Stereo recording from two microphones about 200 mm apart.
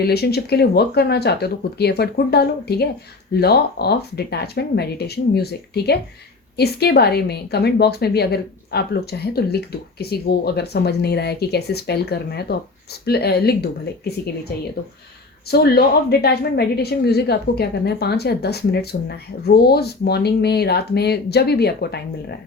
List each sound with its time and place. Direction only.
0.0 s a woman's voice: 50° left (ahead or behind)
15.4 s a woman's voice: 50° left (ahead or behind)